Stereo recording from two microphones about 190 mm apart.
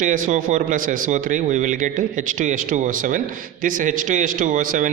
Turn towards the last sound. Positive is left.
turn(degrees=-45)  # may be behind; listen again after turning